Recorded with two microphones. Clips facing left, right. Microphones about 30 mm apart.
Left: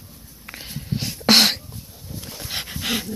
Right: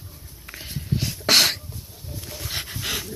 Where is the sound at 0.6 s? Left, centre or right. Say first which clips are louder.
Right 1 dB; centre.